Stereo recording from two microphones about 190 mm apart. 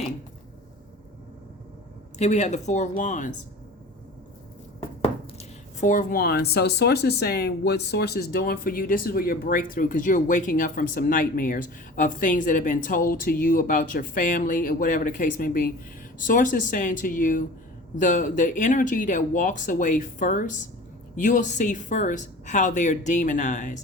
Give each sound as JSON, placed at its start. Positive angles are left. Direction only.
{"t": 2.1, "sound": "speech", "side_deg": 35}
{"t": 4.8, "sound": "speech", "side_deg": 30}